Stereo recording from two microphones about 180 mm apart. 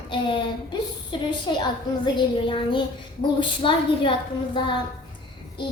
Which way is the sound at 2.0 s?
25° left (ahead or behind).